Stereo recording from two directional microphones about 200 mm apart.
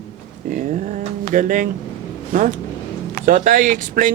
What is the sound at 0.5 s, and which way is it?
A man's voice, 40° right (ahead or behind).